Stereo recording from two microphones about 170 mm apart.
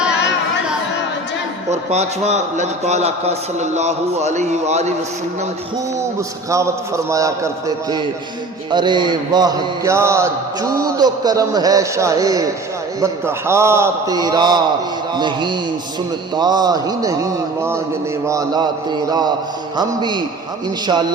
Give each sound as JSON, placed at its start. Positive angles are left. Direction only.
{"t": 1.9, "sound": "a man's voice", "side_deg": -40}
{"t": 6.1, "sound": "a man's voice", "side_deg": -15}